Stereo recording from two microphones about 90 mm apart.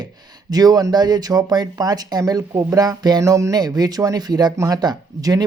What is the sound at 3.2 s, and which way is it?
Speech, 35° right (ahead or behind).